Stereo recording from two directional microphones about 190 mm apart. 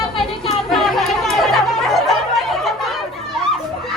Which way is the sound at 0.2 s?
Centre (ahead or behind).